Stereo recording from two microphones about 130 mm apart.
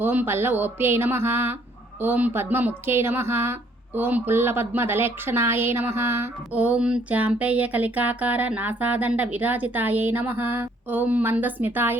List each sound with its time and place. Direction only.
0.0 s speech: 15° right (ahead or behind)